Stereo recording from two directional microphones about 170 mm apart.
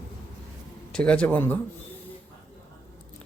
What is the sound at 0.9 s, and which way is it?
Speech, 5° left (ahead or behind).